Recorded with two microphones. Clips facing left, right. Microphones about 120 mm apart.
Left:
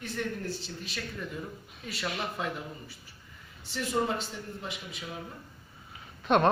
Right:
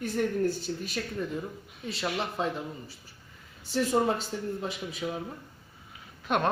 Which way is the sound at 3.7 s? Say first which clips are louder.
Right 4 dB; 40° right (ahead or behind).